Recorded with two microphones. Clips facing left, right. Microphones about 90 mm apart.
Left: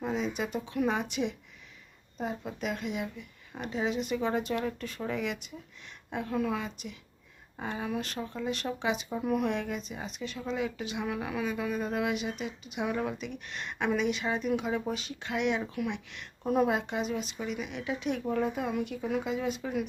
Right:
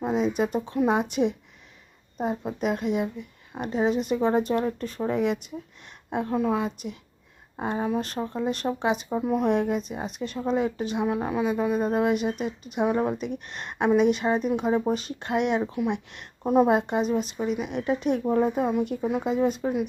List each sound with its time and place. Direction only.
0.3 s speech: 45° right (ahead or behind)
5.1 s speech: 40° right (ahead or behind)
9.0 s speech: 25° right (ahead or behind)
9.5 s speech: 45° right (ahead or behind)
11.0 s speech: 25° right (ahead or behind); by 15.6 s 45° right (ahead or behind)
15.6 s a woman's voice: 25° right (ahead or behind)
16.6 s speech: 45° right (ahead or behind)
18.2 s speech: 30° right (ahead or behind)